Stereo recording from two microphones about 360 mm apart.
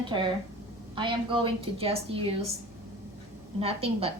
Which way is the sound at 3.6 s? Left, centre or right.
Centre.